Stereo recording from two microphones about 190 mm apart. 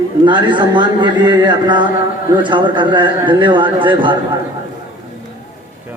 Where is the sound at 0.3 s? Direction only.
25° right (ahead or behind).